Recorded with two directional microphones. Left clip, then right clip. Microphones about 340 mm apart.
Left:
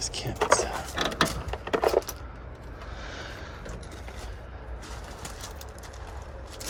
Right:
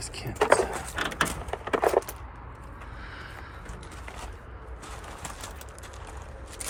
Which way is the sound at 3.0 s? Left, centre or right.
Centre.